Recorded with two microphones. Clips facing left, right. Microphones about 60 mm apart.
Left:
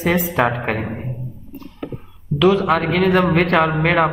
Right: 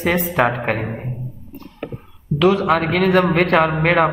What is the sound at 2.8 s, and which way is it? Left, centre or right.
Speech, right.